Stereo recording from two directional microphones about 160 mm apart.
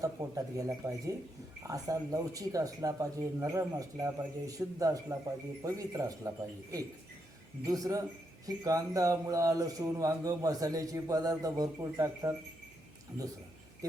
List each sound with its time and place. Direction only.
0.0 s speech: 20° right (ahead or behind)